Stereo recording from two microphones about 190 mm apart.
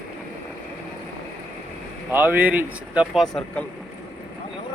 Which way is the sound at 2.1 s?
10° right (ahead or behind).